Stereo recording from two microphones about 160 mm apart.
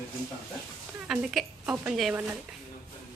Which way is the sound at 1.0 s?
5° right (ahead or behind).